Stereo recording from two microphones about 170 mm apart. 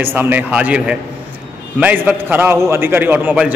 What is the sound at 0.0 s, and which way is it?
A man's voice, 10° right (ahead or behind).